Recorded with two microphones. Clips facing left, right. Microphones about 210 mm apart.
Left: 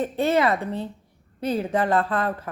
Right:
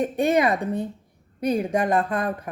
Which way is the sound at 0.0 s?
15° right (ahead or behind).